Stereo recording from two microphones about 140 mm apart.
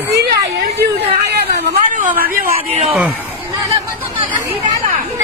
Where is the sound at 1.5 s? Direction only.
70° right (ahead or behind).